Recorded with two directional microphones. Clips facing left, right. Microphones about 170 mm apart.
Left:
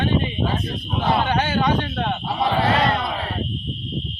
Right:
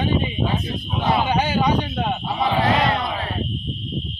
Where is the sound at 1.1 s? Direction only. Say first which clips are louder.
Right 1 dB; 10° right (ahead or behind).